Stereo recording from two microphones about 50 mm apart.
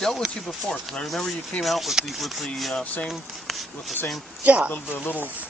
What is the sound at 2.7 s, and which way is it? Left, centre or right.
Speech, left.